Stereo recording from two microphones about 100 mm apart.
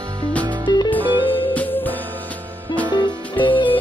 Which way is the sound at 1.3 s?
20° left (ahead or behind).